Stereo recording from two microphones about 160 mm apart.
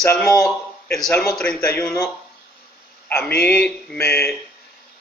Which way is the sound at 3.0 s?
10° left (ahead or behind).